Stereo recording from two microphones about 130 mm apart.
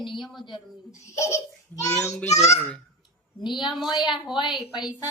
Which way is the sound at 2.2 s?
60° left (ahead or behind).